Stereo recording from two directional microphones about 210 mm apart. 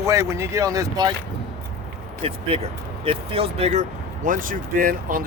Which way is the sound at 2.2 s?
25° right (ahead or behind).